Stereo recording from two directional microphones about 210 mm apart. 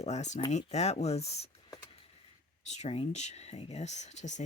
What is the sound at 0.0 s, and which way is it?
Speech, 35° left (ahead or behind).